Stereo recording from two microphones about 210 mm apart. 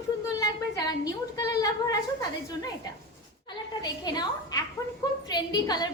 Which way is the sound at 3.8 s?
20° left (ahead or behind).